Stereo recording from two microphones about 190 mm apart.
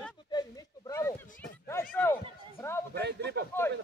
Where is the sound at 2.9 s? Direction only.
60° right (ahead or behind).